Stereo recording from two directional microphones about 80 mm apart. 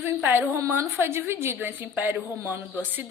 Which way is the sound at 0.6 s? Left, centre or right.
Right.